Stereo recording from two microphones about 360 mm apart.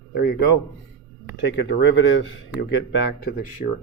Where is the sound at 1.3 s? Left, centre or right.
Left.